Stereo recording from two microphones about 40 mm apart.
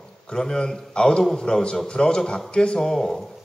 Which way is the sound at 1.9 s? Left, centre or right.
Left.